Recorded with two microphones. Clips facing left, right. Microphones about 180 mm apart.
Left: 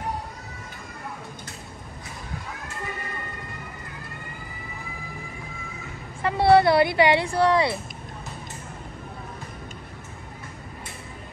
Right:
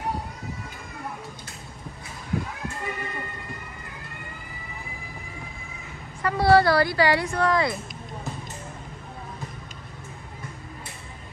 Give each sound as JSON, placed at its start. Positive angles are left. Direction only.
{"t": 6.2, "sound": "speech", "side_deg": 25}